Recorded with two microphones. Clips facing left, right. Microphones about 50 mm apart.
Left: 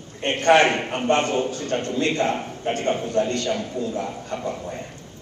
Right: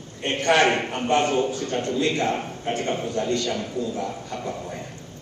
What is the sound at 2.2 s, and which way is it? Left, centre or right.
A man's voice, left.